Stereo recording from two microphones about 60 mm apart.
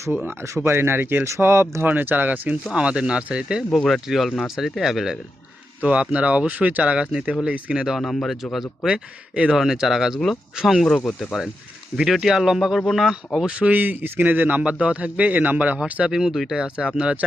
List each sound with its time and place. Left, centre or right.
0.4 s speech: right
1.8 s a man's voice: right
2.7 s speech: centre
3.7 s speech: centre
5.8 s a man's voice: right
7.9 s speech: centre
8.9 s speech: centre
10.8 s speech: centre
11.3 s speech: centre
13.6 s a man's voice: right
16.0 s speech: centre
16.6 s speech: centre